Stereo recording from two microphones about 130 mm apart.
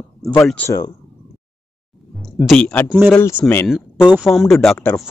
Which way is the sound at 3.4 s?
10° left (ahead or behind).